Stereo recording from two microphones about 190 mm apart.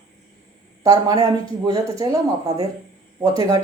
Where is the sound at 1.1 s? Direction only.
20° right (ahead or behind).